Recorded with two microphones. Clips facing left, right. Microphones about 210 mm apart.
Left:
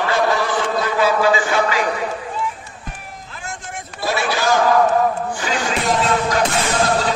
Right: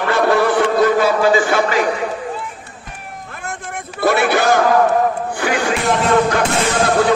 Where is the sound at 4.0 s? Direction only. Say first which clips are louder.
Right 6 dB; 60° right (ahead or behind).